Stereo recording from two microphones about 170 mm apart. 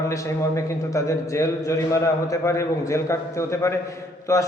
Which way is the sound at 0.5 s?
15° left (ahead or behind).